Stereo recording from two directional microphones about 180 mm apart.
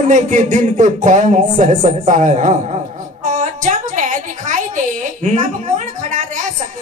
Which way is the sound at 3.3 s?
45° right (ahead or behind).